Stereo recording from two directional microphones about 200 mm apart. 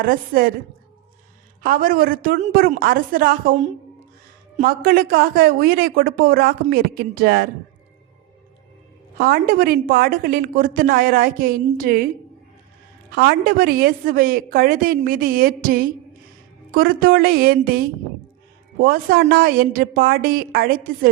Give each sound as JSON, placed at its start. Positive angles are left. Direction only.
{"t": 0.0, "sound": "a woman's voice", "side_deg": -45}
{"t": 1.6, "sound": "a woman's voice", "side_deg": -45}
{"t": 9.1, "sound": "a woman's voice", "side_deg": -45}
{"t": 13.1, "sound": "a woman's voice", "side_deg": -50}